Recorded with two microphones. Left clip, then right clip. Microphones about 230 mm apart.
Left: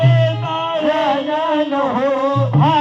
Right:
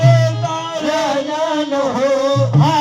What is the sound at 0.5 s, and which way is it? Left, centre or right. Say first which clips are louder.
Music: left 2 dB; right.